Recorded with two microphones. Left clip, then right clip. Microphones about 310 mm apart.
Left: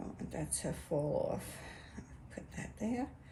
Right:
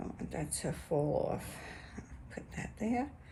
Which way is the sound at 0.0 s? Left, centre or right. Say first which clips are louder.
Right 2 dB; right.